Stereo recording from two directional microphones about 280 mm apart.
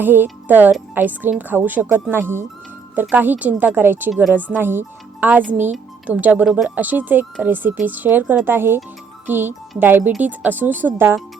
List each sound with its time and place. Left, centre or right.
0.0 s a child's voice: centre